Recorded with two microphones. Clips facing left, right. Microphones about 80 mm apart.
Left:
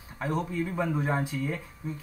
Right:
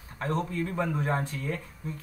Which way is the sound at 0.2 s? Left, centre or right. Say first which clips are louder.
Even; centre.